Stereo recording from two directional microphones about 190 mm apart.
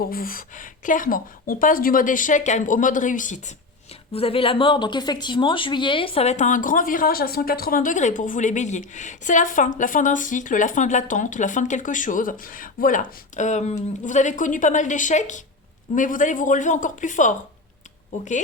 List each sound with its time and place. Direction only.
0.0 s a woman's voice: 50° left (ahead or behind)
4.1 s speech: 30° left (ahead or behind)